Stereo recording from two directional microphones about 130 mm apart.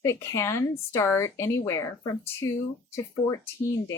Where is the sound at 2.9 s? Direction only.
25° left (ahead or behind).